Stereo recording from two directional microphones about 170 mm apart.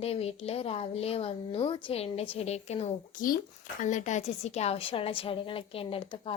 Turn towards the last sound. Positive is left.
turn(degrees=30)  # may be behind; listen again after turning